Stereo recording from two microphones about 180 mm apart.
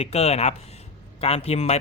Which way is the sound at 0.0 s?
35° left (ahead or behind).